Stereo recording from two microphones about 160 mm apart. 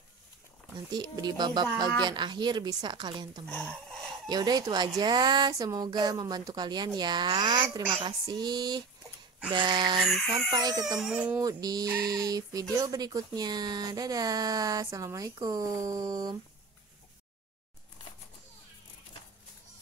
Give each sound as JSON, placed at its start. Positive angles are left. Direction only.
{"t": 0.9, "sound": "speech", "side_deg": -25}
{"t": 3.4, "sound": "speech", "side_deg": 5}
{"t": 4.3, "sound": "speech", "side_deg": -25}
{"t": 11.0, "sound": "speech", "side_deg": -5}
{"t": 11.3, "sound": "speech", "side_deg": -25}